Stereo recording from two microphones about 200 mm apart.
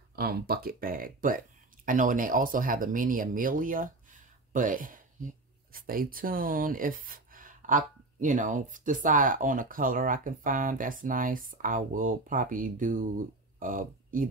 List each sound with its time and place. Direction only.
0.1 s speech: 50° right (ahead or behind)